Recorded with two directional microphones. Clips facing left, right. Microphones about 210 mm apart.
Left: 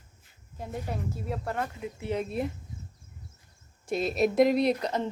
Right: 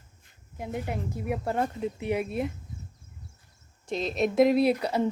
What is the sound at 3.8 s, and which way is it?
A woman's voice, 10° left (ahead or behind).